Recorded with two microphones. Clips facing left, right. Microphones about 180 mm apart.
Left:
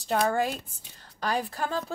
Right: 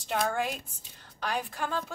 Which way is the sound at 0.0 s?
35° left (ahead or behind).